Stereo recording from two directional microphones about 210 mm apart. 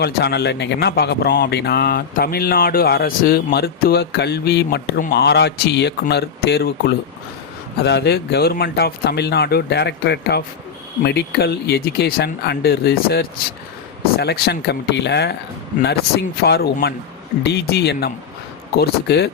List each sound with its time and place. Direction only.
0.0 s speech: 50° left (ahead or behind)